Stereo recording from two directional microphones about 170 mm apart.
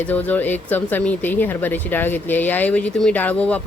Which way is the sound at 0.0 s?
10° left (ahead or behind).